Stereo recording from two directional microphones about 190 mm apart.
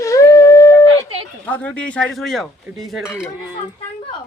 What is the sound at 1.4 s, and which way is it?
Speech, 10° left (ahead or behind).